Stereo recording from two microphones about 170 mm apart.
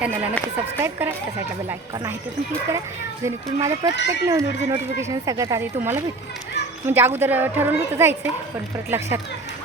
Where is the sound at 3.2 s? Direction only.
20° right (ahead or behind).